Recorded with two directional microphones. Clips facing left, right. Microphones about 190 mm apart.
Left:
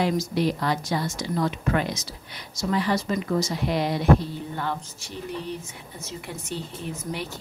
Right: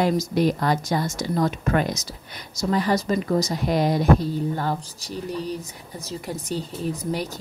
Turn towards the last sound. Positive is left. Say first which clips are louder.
# right 5 dB
turn(degrees=-40)  # may be behind; listen again after turning